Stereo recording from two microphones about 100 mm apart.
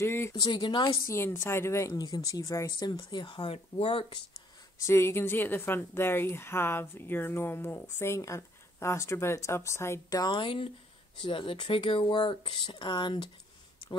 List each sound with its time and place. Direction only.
0.0 s a woman's voice: 25° left (ahead or behind)
0.3 s speech: 45° left (ahead or behind)
1.0 s a woman's voice: 25° left (ahead or behind)
2.8 s speech: 50° left (ahead or behind); by 4.2 s 70° left (ahead or behind)
4.7 s a woman's voice: 25° left (ahead or behind); by 13.3 s 50° left (ahead or behind)